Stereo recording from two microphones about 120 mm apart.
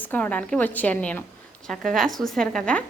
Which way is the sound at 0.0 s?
15° left (ahead or behind).